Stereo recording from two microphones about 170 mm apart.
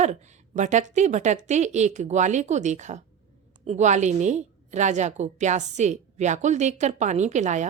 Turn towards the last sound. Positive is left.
turn(degrees=-45)  # may be behind; listen again after turning